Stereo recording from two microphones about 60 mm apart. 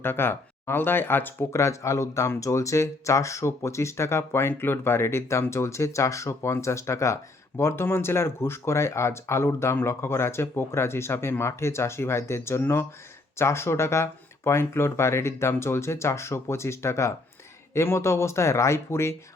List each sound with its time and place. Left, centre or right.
0.0 s speech: left
1.5 s speech: left